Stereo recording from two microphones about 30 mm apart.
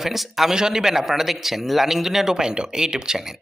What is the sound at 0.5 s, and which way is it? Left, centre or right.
Speech, right.